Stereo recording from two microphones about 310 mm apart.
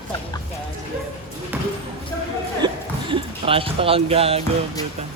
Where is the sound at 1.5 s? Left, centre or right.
Centre.